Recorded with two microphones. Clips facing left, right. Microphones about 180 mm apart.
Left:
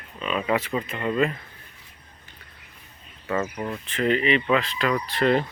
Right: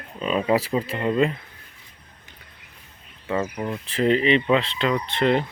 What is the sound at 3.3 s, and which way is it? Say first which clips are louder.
Speech: right 1 dB; 15° right (ahead or behind).